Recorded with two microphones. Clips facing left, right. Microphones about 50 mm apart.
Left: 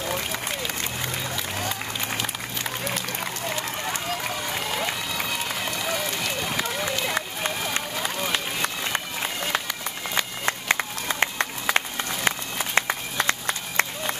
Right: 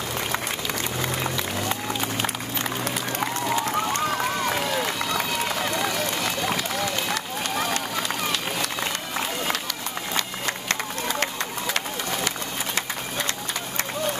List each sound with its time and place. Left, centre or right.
8.3 s run: left
10.4 s run: left